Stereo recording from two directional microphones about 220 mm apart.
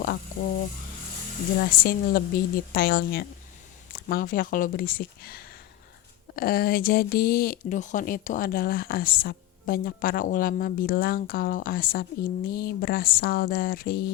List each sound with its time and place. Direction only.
1.8 s a woman's voice: 40° left (ahead or behind)